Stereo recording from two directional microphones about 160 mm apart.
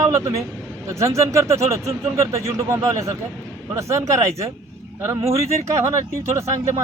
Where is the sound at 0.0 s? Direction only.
20° right (ahead or behind).